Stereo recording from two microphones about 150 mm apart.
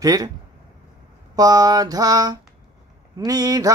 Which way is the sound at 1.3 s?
25° right (ahead or behind).